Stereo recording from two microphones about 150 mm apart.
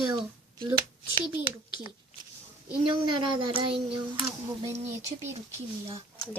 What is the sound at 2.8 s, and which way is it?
Speech, 30° right (ahead or behind).